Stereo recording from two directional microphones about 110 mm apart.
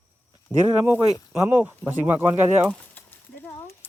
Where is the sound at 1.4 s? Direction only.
15° right (ahead or behind).